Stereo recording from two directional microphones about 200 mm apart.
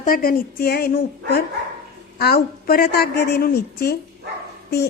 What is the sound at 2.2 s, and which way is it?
A woman's voice, 50° left (ahead or behind).